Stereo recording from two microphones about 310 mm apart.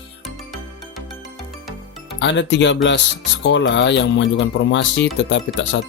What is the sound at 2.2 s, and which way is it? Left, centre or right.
Speech, left.